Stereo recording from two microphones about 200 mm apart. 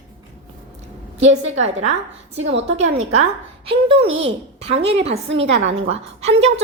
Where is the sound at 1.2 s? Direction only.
35° right (ahead or behind).